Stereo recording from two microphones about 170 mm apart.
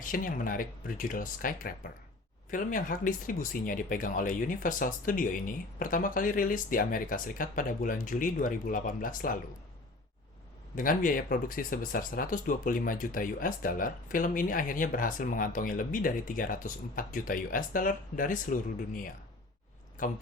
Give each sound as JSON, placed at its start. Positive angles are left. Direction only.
{"t": 0.0, "sound": "speech", "side_deg": 55}
{"t": 10.8, "sound": "speech", "side_deg": 55}